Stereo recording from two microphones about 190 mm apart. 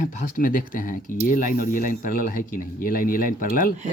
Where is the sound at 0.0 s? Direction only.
45° left (ahead or behind).